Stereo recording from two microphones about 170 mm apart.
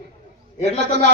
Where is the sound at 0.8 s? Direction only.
85° right.